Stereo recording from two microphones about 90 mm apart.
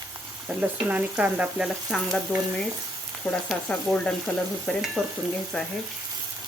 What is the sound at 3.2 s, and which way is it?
Speech, centre (ahead or behind).